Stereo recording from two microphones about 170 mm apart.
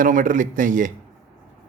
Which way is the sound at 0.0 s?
50° right (ahead or behind).